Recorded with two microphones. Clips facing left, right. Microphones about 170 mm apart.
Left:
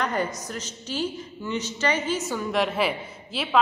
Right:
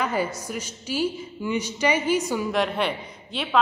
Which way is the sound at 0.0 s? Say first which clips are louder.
Right 1 dB; 5° right (ahead or behind).